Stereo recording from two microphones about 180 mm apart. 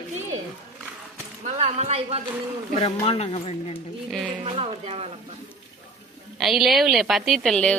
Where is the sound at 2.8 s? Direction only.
35° left (ahead or behind).